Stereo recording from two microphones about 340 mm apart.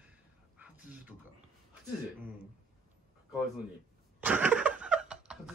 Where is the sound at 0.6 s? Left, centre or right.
Centre.